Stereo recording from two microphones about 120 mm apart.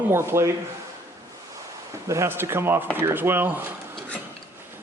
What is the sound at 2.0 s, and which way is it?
Speech, 25° right (ahead or behind).